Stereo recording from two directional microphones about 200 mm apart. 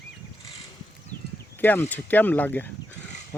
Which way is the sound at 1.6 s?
10° left (ahead or behind).